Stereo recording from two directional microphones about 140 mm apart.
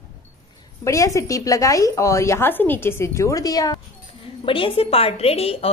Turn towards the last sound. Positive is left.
turn(degrees=45)  # may be behind; listen again after turning